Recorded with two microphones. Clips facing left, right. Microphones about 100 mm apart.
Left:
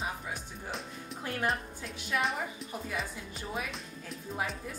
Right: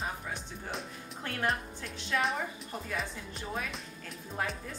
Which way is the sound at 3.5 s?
Centre (ahead or behind).